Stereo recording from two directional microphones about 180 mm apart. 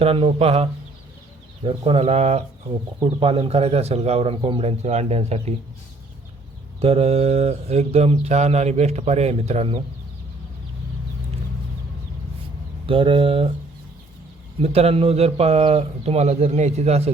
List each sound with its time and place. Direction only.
0.0 s mantra: 30° right (ahead or behind)
6.8 s mantra: 35° right (ahead or behind)
12.8 s speech: 30° right (ahead or behind)
14.6 s mantra: 35° right (ahead or behind)